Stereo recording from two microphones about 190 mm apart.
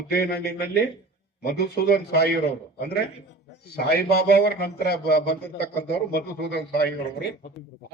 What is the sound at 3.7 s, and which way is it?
A man's voice, 55° left (ahead or behind).